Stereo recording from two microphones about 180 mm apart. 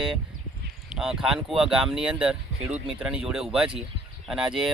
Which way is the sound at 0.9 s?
5° right (ahead or behind).